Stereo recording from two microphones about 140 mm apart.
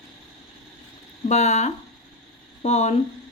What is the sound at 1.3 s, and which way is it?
Speech, 55° left (ahead or behind).